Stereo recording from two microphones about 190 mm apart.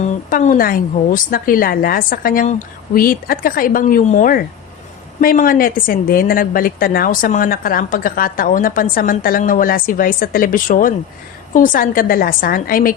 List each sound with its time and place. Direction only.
0.3 s a woman's voice: 45° left (ahead or behind)